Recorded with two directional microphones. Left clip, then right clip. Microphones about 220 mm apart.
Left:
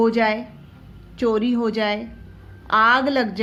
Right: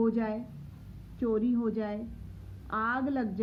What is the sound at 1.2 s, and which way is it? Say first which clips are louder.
A woman's voice: left 10 dB; 25° left (ahead or behind).